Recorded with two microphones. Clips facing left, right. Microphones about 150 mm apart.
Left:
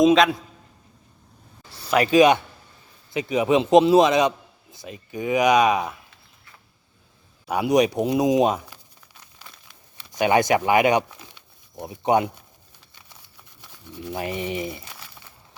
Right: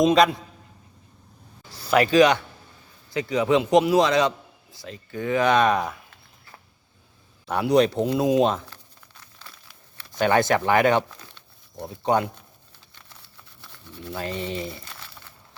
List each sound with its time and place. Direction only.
0.0 s a man's voice: centre (ahead or behind)
1.9 s a man's voice: 20° left (ahead or behind)
7.4 s speech: 15° left (ahead or behind)
10.0 s speech: 15° left (ahead or behind)
12.9 s a sound: 15° left (ahead or behind)